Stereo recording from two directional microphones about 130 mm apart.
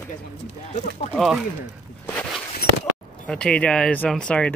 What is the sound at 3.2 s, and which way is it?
Speech, 5° left (ahead or behind).